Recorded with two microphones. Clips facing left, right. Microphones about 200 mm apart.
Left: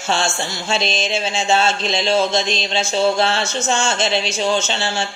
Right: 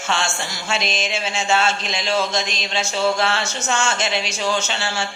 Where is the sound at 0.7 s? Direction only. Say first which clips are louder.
Left 3 dB; 30° left (ahead or behind).